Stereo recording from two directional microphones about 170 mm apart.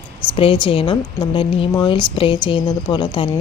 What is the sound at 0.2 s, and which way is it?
Speech, 30° left (ahead or behind).